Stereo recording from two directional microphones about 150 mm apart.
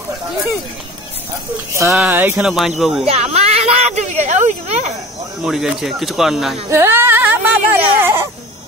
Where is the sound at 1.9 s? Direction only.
10° right (ahead or behind).